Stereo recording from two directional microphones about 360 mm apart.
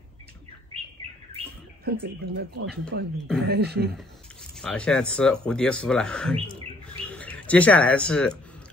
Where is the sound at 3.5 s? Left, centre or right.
Right.